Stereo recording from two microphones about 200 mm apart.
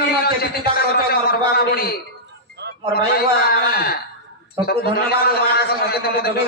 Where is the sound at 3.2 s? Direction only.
50° left (ahead or behind).